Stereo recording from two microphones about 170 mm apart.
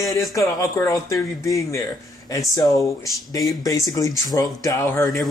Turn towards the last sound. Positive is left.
turn(degrees=15)  # may be behind; listen again after turning